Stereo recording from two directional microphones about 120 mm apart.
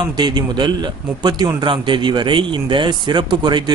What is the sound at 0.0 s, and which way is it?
A man's voice, 40° right (ahead or behind).